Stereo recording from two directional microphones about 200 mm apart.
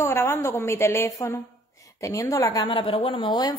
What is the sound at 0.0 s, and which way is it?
Speech, 15° left (ahead or behind).